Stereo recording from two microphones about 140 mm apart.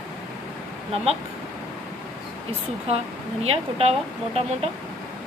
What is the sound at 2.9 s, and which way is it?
A woman's voice, 45° right (ahead or behind).